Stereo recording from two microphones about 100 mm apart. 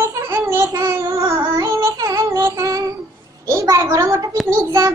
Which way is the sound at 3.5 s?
30° right (ahead or behind).